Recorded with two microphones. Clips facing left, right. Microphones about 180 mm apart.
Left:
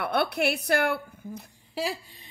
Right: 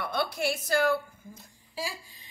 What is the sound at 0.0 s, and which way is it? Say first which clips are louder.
A woman's voice: left 4 dB; 65° left (ahead or behind).